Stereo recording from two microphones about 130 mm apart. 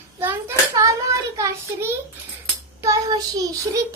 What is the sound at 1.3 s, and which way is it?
Child singing, 20° right (ahead or behind).